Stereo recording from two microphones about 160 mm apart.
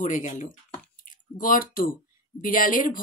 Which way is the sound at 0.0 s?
50° left (ahead or behind).